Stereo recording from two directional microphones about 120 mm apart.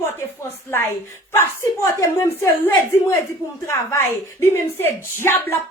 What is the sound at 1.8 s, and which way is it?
A woman's voice, 25° left (ahead or behind).